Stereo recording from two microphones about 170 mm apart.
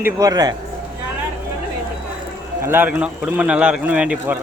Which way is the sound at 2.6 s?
15° right (ahead or behind).